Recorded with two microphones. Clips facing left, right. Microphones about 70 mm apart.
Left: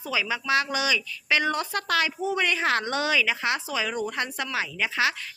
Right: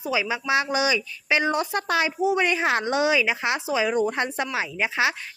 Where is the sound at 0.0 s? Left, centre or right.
Centre.